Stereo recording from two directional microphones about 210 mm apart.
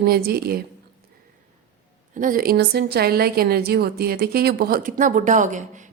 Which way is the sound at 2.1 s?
40° right (ahead or behind).